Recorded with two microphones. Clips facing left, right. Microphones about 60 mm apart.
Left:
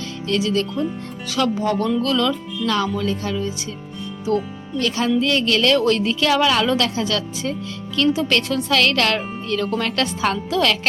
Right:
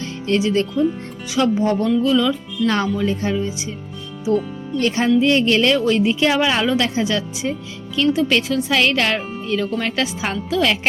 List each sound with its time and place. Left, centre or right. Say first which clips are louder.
0.3 s a woman's voice: right 2 dB; right
2.0 s speech: right 3 dB; centre
2.6 s a woman's voice: right 2 dB; right
5.7 s a woman's voice: right 1 dB; centre
8.1 s a woman's voice: right 2 dB; centre